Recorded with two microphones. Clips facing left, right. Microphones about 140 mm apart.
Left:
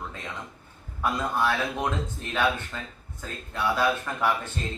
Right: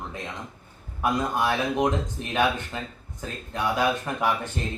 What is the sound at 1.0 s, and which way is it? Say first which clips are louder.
Speech: right 2 dB; 15° right (ahead or behind).